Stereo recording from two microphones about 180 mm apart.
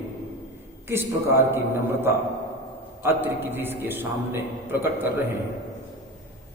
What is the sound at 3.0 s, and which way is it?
A man's voice, 10° right (ahead or behind).